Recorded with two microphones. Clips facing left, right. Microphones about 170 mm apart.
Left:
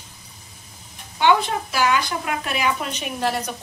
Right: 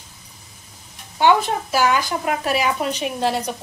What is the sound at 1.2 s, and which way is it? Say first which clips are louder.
A woman's voice: right 2 dB; 45° right (ahead or behind).